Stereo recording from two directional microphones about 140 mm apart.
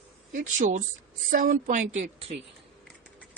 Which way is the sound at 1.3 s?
85° right.